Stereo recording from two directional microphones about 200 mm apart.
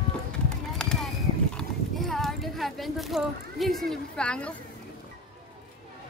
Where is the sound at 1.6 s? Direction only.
Centre (ahead or behind).